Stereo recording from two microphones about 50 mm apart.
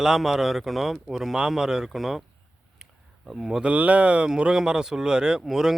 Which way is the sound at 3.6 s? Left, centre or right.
Right.